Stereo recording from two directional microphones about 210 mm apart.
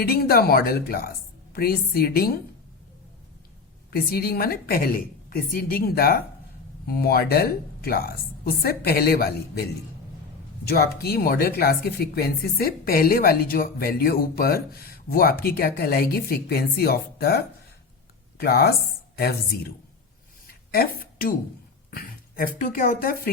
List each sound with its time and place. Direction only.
0.0 s speech: 45° left (ahead or behind)
3.9 s speech: 45° left (ahead or behind)
10.7 s speech: 50° left (ahead or behind)
20.5 s a sound: 45° left (ahead or behind)
21.8 s speech: 45° left (ahead or behind)